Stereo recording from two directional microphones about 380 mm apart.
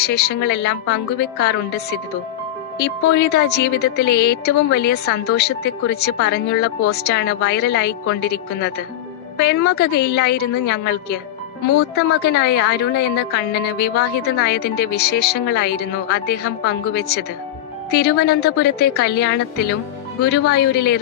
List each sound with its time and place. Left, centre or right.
0.0 s a woman's voice: left